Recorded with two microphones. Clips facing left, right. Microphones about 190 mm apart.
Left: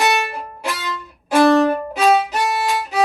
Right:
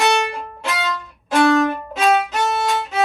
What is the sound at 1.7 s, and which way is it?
Violin, 35° left (ahead or behind).